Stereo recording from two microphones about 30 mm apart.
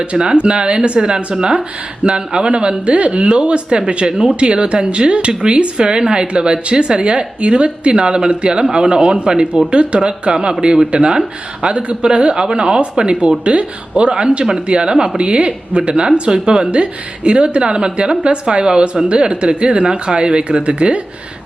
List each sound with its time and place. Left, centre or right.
0.0 s speech: right
4.0 s speech: right
20.7 s speech: right